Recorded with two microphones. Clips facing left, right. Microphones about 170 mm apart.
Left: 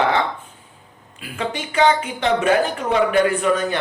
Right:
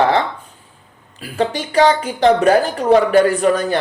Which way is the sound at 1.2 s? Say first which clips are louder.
Right 6 dB; 35° right (ahead or behind).